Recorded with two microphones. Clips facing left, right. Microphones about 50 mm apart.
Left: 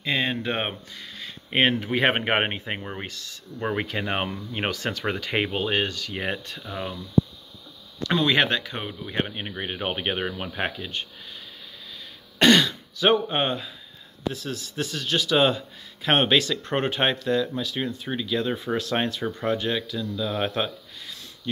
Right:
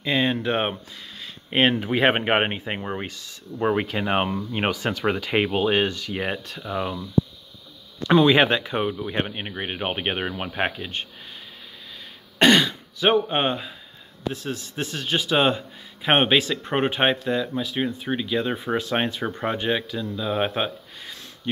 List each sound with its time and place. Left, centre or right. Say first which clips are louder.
0.0 s speech: right 3 dB; centre
1.2 s a sound: right 2 dB; centre
1.8 s speech: right 2 dB; centre
6.1 s speech: right 2 dB; centre
8.0 s speech: right 5 dB; centre
12.4 s speech: right 1 dB; right